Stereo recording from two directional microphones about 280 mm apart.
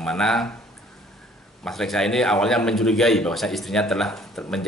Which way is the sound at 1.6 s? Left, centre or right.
Centre.